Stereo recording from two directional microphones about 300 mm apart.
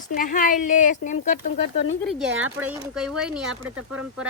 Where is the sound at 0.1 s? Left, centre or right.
Left.